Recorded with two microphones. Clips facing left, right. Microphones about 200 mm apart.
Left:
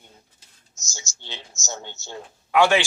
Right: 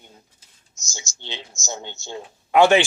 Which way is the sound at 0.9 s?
20° right (ahead or behind).